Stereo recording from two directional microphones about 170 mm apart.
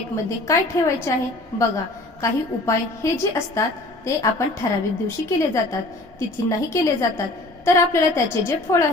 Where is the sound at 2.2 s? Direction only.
20° left (ahead or behind).